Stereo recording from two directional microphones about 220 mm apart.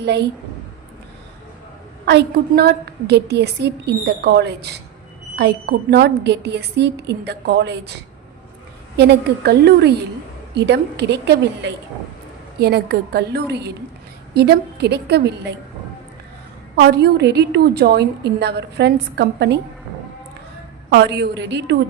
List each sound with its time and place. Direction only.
0.0 s a woman's voice: 50° right (ahead or behind)
2.0 s a woman's voice: 50° right (ahead or behind)
9.0 s a woman's voice: 50° right (ahead or behind)
16.7 s a woman's voice: 50° right (ahead or behind)
20.9 s a woman's voice: 50° right (ahead or behind)